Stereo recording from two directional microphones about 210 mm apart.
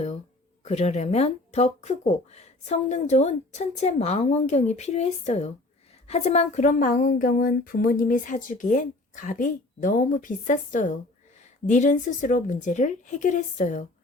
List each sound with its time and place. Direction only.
0.6 s speech: 30° left (ahead or behind)